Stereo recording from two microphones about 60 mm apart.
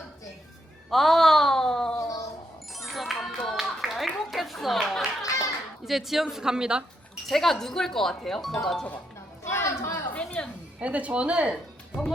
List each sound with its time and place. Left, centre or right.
0.9 s a sound: centre
2.0 s child singing: left
2.7 s music: centre
3.4 s a sound: centre
5.2 s children playing: left
5.8 s speech: centre
7.3 s speech: centre
9.4 s chatter: left
10.2 s a sound: centre
10.8 s speech: right